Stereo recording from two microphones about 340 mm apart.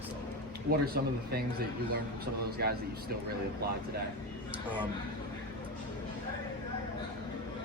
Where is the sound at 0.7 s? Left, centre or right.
Right.